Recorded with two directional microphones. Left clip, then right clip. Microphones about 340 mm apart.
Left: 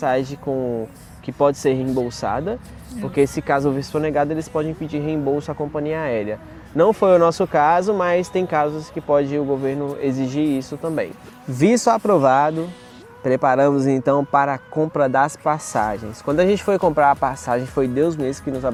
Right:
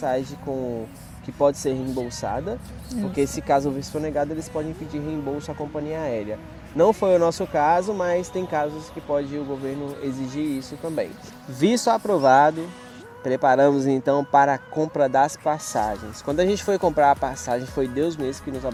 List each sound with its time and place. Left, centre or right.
0.0 s a man's voice: left